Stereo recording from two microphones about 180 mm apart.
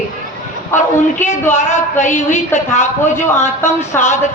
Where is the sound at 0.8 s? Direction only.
40° left (ahead or behind).